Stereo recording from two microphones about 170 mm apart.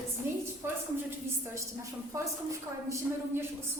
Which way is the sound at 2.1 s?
20° right (ahead or behind).